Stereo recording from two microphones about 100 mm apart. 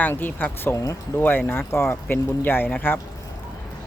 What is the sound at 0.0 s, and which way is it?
Speech, 20° left (ahead or behind).